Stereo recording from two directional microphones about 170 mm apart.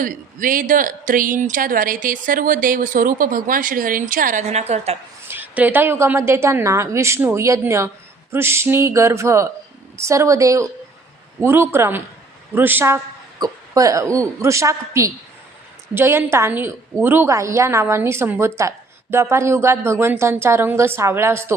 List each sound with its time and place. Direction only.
0.0 s speech: 55° right (ahead or behind)
5.3 s a woman's voice: 10° right (ahead or behind)